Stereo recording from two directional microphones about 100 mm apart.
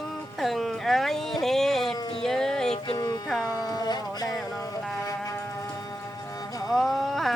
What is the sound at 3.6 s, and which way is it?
Music, 40° left (ahead or behind).